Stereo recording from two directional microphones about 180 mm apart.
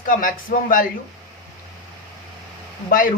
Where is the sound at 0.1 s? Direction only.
50° left (ahead or behind).